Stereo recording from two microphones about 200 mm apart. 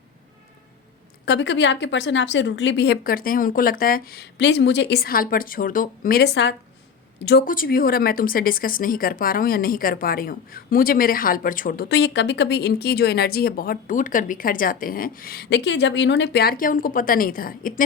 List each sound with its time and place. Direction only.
1.2 s a woman's voice: 60° left (ahead or behind)
7.3 s speech: 50° left (ahead or behind)